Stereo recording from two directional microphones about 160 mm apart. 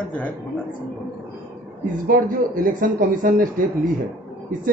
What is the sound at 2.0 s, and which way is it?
Speech, 60° right (ahead or behind).